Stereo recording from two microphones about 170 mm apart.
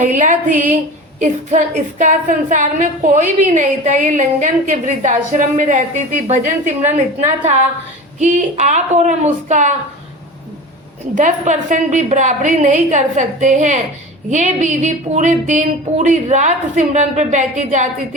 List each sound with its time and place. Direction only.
0.0 s a woman's voice: 50° right (ahead or behind)
11.1 s a woman's voice: 45° right (ahead or behind)